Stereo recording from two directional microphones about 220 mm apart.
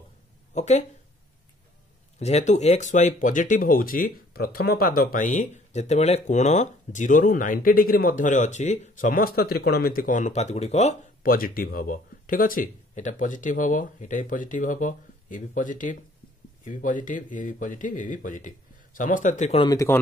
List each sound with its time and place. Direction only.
0.6 s speech: 30° left (ahead or behind)
2.1 s speech: 30° left (ahead or behind)